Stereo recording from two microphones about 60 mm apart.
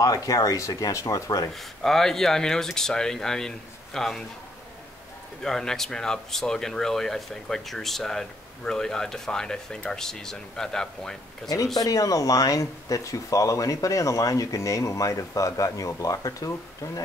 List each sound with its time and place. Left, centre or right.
0.0 s speech: left
1.5 s speech: centre
5.4 s speech: centre
11.4 s speech: left
16.0 s speech: left